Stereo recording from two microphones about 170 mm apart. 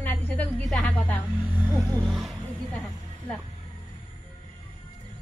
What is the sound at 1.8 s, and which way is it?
Vehicle, centre (ahead or behind).